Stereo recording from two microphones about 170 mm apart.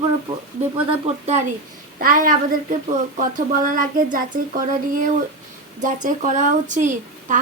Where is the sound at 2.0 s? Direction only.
55° right (ahead or behind).